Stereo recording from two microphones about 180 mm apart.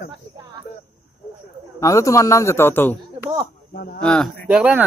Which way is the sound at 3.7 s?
55° left (ahead or behind).